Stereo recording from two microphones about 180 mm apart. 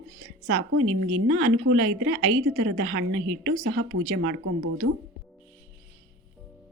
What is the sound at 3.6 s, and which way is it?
Speech, 80° right.